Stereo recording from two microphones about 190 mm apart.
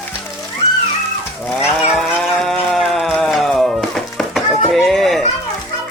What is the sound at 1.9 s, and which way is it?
Music, centre (ahead or behind).